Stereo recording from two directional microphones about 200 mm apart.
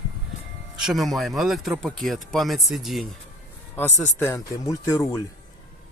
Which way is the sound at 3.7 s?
10° left (ahead or behind).